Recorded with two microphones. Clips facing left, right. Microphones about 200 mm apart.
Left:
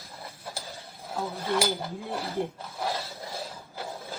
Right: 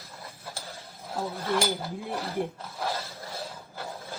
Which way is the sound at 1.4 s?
15° left (ahead or behind).